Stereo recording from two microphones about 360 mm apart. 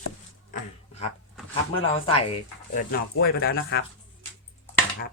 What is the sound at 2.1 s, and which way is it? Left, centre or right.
Speech, centre.